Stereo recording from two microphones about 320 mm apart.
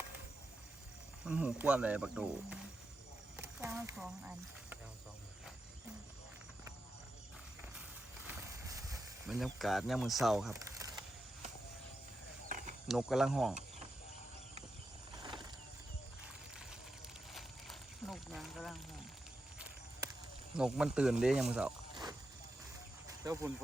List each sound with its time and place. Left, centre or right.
1.2 s speech: centre
8.2 s snake: centre
12.5 s snake: right
12.9 s speech: centre
13.5 s a sound: right
15.1 s a sound: centre
17.3 s a sound: centre
20.6 s speech: centre
21.5 s snake: centre
23.0 s cricket: centre